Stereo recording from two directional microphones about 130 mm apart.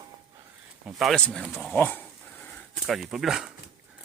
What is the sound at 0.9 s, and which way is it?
Speech, 5° left (ahead or behind).